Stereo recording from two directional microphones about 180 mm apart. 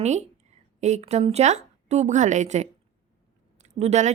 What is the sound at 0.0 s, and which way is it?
A woman's voice, 40° right (ahead or behind).